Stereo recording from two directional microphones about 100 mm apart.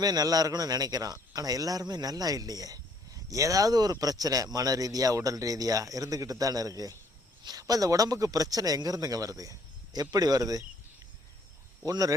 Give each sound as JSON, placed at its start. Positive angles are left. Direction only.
{"t": 0.0, "sound": "a man's voice", "side_deg": -40}
{"t": 11.9, "sound": "a man's voice", "side_deg": -35}